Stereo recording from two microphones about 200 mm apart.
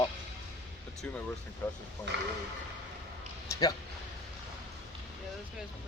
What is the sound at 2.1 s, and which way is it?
Speech, 60° right (ahead or behind).